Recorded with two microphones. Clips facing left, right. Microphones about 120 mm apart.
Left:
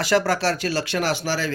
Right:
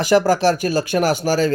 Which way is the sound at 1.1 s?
45° right (ahead or behind).